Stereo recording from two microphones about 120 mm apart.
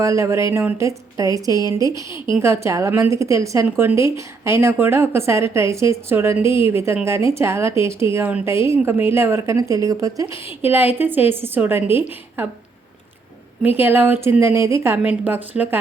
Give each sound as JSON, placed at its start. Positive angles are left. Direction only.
{"t": 0.0, "sound": "a woman's voice", "side_deg": -25}
{"t": 13.7, "sound": "speech", "side_deg": -20}